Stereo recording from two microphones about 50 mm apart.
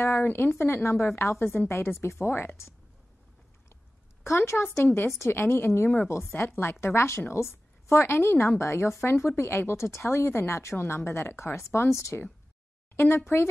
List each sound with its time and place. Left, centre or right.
0.0 s a woman's voice: left
0.8 s speech: left
4.2 s speech: left
8.5 s a woman's voice: left
12.9 s a woman's voice: left